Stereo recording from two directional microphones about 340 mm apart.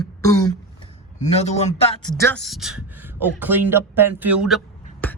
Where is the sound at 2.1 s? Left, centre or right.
Centre.